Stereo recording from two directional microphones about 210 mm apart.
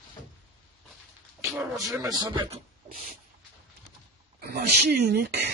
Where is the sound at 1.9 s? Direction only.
20° right (ahead or behind).